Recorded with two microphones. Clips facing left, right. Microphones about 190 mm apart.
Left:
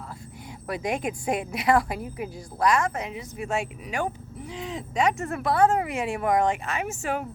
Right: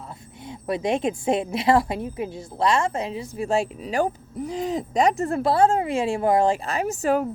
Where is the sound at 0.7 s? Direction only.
25° right (ahead or behind).